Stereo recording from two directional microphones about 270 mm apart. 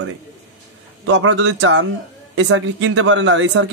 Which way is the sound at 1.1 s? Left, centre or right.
Right.